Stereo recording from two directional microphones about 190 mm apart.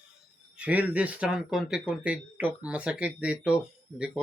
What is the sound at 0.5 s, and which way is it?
Speech, 5° right (ahead or behind).